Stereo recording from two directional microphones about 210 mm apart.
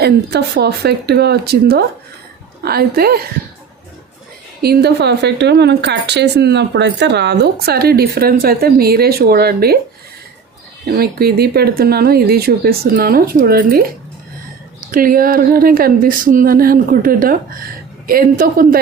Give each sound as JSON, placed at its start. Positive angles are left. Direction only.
{"t": 0.0, "sound": "speech", "side_deg": -50}
{"t": 4.6, "sound": "speech", "side_deg": -50}
{"t": 10.8, "sound": "speech", "side_deg": -45}